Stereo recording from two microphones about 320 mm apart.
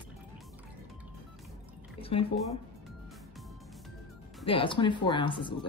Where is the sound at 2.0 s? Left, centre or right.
Centre.